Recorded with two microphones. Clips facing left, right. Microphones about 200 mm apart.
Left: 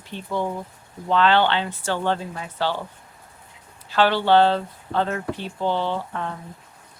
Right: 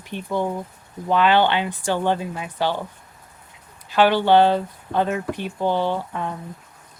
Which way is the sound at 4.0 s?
15° right (ahead or behind).